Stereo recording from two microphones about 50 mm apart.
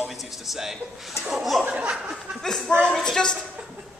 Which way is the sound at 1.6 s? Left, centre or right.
Right.